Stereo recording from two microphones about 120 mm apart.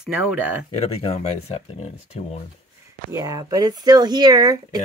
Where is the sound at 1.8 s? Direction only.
60° left (ahead or behind).